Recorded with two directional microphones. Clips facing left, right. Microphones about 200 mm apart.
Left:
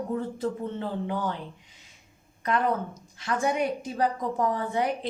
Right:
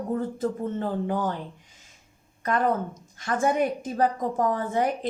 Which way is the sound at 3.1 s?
50° right (ahead or behind).